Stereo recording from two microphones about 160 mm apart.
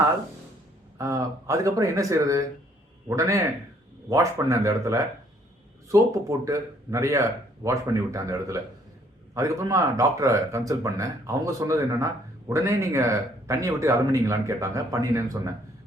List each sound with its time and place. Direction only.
0.9 s speech: 20° right (ahead or behind)